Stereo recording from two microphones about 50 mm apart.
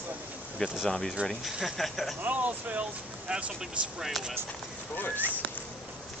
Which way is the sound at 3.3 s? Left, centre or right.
Centre.